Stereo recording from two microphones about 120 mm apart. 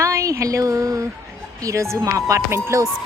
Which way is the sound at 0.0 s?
25° right (ahead or behind).